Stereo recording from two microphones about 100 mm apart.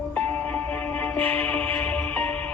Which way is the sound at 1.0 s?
15° left (ahead or behind).